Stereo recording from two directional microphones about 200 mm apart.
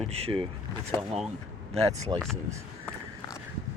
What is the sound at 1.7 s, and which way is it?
Speech, 30° right (ahead or behind).